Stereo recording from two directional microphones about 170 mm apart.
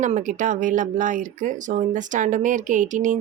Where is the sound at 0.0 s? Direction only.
45° right (ahead or behind).